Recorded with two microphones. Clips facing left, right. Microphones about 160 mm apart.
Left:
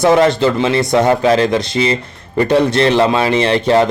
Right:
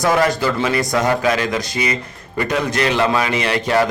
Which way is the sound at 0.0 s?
25° left (ahead or behind).